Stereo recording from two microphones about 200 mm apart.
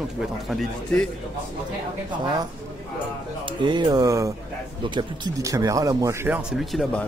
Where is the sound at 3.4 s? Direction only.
25° right (ahead or behind); by 7.1 s 5° left (ahead or behind).